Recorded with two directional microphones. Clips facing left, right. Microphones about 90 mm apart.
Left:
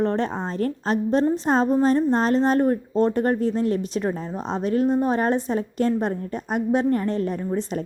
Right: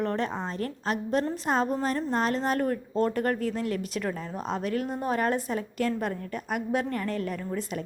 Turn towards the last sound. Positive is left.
turn(degrees=30)  # may be behind; listen again after turning